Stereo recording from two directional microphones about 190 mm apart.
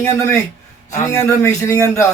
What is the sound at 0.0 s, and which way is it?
Speech, 15° left (ahead or behind).